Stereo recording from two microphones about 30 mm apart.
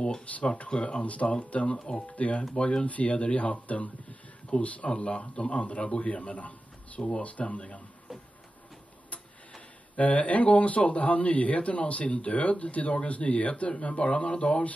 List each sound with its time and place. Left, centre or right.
0.2 s speech: left
0.7 s speech: left
1.8 s speech: left
2.1 s speech: left
2.5 s speech: left
2.9 s speech: left
4.8 s speech: left
7.0 s speech: left
7.2 s speech: left
9.9 s speech: left
13.7 s speech: left